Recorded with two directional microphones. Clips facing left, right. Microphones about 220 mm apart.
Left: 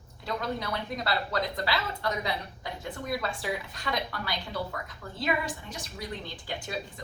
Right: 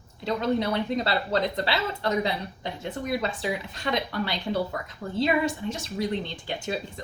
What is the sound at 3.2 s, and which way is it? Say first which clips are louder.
A woman's voice: right 4 dB; 25° right (ahead or behind).